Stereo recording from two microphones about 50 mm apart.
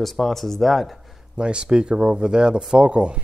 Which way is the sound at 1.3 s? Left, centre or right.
Centre.